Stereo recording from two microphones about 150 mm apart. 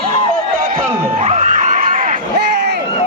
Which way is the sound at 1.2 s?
45° right (ahead or behind).